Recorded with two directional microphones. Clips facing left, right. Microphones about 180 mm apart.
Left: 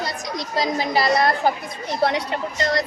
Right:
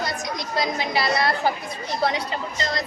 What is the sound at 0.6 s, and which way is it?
Speech, 40° left (ahead or behind).